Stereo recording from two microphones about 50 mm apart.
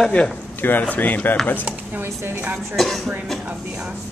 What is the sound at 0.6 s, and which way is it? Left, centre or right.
Speech, left.